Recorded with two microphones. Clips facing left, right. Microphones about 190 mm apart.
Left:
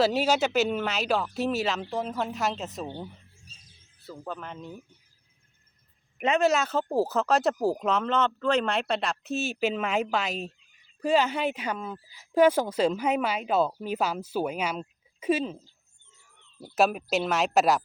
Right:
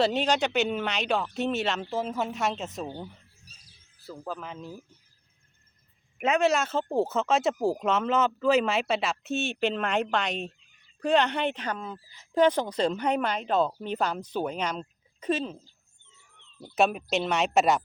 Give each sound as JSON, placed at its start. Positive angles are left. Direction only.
{"t": 0.0, "sound": "speech", "side_deg": 5}
{"t": 3.4, "sound": "music", "side_deg": 25}
{"t": 4.0, "sound": "speech", "side_deg": 0}
{"t": 6.1, "sound": "speech", "side_deg": -5}